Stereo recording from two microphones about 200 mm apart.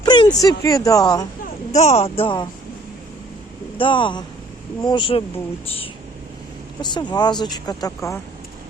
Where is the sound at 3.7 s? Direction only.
25° left (ahead or behind).